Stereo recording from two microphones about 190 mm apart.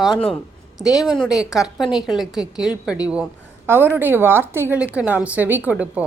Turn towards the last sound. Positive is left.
turn(degrees=-10)  # may be behind; listen again after turning